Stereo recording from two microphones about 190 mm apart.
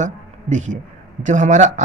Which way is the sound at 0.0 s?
40° right (ahead or behind).